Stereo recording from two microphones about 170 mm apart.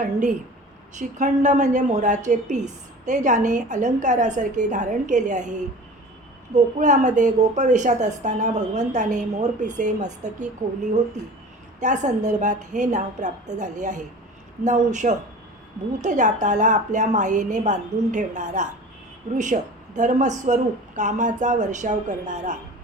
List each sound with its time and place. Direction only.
0.9 s a woman's voice: 45° right (ahead or behind)
6.7 s a woman's voice: 45° right (ahead or behind)
11.8 s a woman's voice: 45° right (ahead or behind)